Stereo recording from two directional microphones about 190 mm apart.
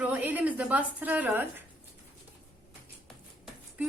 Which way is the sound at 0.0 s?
10° right (ahead or behind).